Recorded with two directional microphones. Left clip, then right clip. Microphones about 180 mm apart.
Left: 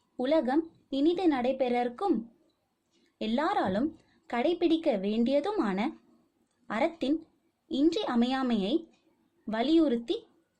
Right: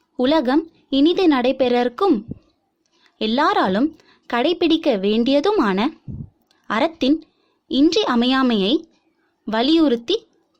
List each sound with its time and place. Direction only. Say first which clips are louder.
0.2 s speech: right 9 dB; 35° right (ahead or behind)